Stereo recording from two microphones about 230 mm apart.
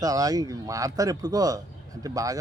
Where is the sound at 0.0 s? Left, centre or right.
Centre.